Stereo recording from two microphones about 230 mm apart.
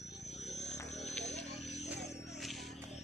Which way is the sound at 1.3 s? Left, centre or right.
Left.